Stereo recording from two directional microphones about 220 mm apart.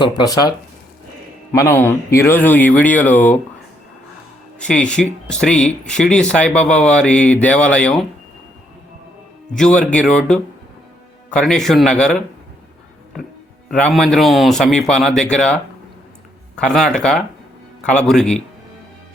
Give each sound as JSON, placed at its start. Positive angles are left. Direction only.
{"t": 0.0, "sound": "speech", "side_deg": 20}
{"t": 1.5, "sound": "speech", "side_deg": 10}
{"t": 4.6, "sound": "speech", "side_deg": 5}
{"t": 9.6, "sound": "speech", "side_deg": 5}
{"t": 13.7, "sound": "speech", "side_deg": 0}
{"t": 16.6, "sound": "speech", "side_deg": 5}